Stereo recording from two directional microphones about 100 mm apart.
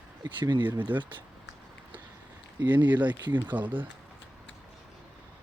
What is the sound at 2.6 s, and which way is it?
Speech, 15° right (ahead or behind).